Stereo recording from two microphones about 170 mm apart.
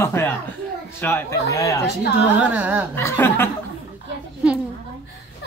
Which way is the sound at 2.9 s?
15° left (ahead or behind).